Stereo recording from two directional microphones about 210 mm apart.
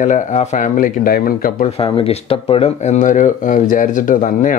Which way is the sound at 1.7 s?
25° left (ahead or behind).